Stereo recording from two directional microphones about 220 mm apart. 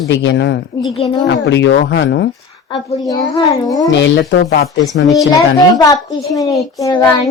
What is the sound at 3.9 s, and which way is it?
Speech, 50° left (ahead or behind).